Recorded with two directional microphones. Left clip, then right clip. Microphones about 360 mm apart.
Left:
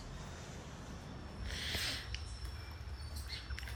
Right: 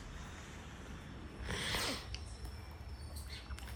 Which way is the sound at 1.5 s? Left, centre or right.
Centre.